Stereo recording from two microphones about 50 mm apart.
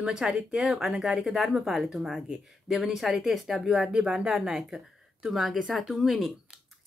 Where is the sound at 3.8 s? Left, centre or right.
Centre.